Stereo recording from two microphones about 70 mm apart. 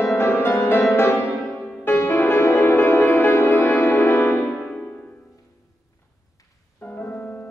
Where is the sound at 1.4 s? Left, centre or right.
Centre.